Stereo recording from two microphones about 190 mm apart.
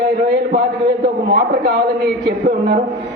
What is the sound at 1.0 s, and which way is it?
A man's voice, 60° right (ahead or behind).